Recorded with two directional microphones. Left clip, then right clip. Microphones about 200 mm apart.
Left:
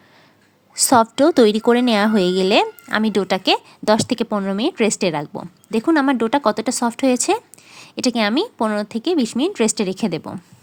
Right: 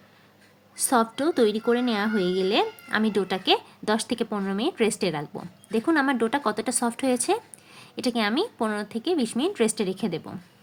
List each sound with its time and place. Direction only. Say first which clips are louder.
0.8 s a woman's voice: left 9 dB; 35° left (ahead or behind)